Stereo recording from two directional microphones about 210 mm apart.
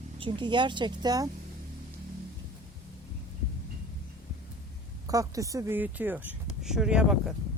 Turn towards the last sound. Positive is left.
turn(degrees=-5)  # may be behind; listen again after turning